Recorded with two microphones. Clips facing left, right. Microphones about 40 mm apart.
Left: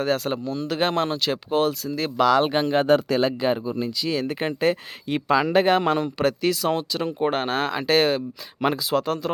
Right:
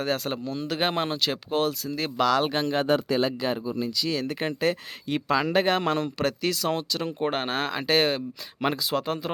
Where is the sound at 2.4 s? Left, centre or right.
Left.